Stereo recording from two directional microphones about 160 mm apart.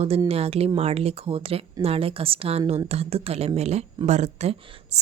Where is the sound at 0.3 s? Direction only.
40° right (ahead or behind).